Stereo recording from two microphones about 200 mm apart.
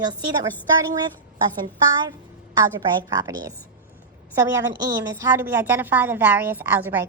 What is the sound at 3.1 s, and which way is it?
Speech, 20° right (ahead or behind).